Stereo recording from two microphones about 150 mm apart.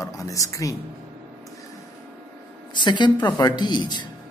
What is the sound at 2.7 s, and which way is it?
A man's voice, 30° left (ahead or behind).